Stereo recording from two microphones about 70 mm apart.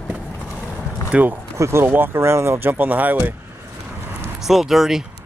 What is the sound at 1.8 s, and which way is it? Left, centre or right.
Speech, right.